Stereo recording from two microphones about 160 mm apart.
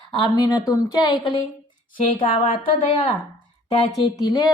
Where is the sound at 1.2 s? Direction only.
35° left (ahead or behind).